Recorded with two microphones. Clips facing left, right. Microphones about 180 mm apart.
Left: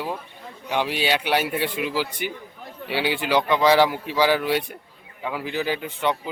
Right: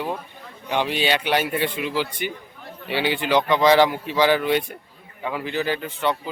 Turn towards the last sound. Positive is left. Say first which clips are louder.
# even
turn(degrees=15)  # may be behind; listen again after turning